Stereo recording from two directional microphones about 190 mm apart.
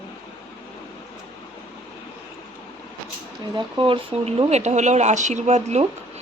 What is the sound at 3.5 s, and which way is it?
Speech, 25° right (ahead or behind).